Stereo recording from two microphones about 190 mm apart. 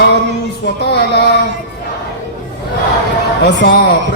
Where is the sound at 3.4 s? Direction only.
65° left (ahead or behind).